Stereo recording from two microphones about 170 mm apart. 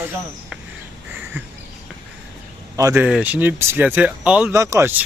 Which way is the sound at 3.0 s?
10° right (ahead or behind).